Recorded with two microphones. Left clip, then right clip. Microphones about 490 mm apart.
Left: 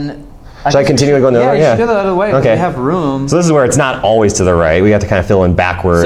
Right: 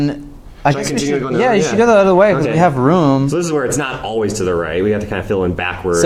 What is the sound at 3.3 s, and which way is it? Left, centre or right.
Speech, left.